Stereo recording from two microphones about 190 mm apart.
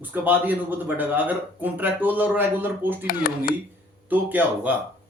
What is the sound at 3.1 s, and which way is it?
Speech, 50° left (ahead or behind).